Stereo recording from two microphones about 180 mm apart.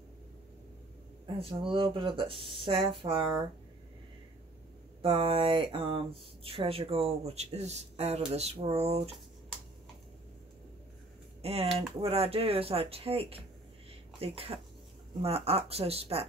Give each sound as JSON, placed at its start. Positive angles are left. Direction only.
{"t": 1.2, "sound": "speech", "side_deg": -30}
{"t": 5.0, "sound": "speech", "side_deg": -30}
{"t": 11.4, "sound": "speech", "side_deg": -35}